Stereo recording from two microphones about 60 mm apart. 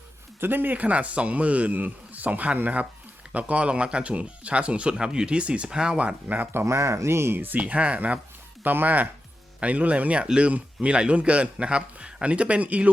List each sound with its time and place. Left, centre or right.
0.3 s speech: right
6.7 s speech: right
7.3 s speech: right